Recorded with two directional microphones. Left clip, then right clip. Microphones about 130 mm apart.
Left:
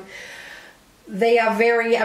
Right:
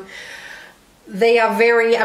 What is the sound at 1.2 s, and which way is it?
Speech, 55° right (ahead or behind).